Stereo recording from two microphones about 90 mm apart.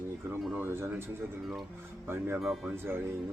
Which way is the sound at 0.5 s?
25° right (ahead or behind).